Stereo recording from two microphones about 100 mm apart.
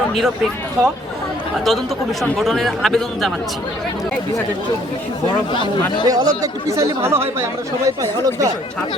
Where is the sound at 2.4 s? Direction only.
Centre (ahead or behind).